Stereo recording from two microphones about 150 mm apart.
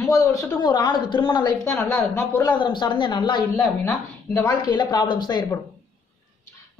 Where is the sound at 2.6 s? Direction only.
30° left (ahead or behind).